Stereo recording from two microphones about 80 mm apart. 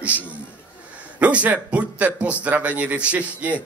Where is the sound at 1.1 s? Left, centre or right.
Centre.